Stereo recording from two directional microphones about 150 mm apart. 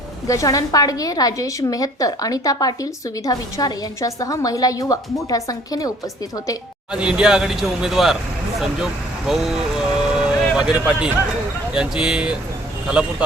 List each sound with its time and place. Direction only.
0.3 s a woman's voice: 20° left (ahead or behind)
6.9 s speech: 5° right (ahead or behind)
10.2 s vehicle: 5° right (ahead or behind)
11.7 s speech: 5° right (ahead or behind)